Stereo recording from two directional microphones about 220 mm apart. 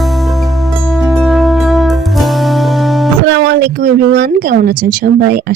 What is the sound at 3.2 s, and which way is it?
A woman's voice, 50° right (ahead or behind).